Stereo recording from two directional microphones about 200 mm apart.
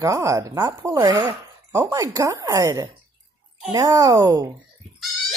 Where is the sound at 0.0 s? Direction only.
15° right (ahead or behind).